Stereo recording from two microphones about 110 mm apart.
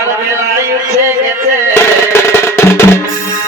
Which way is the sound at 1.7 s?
20° left (ahead or behind).